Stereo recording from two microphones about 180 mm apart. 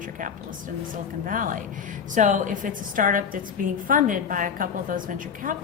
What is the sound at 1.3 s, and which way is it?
A woman's voice, 50° right (ahead or behind).